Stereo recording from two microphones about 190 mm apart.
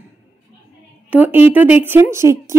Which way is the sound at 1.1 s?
10° right (ahead or behind).